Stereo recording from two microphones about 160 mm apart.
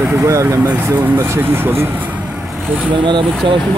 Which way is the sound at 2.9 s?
30° right (ahead or behind).